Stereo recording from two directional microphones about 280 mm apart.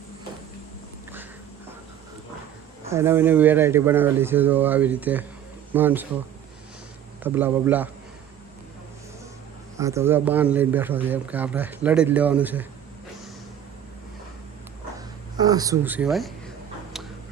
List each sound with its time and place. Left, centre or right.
2.9 s speech: centre
7.3 s speech: centre
9.7 s speech: centre
14.9 s dog: centre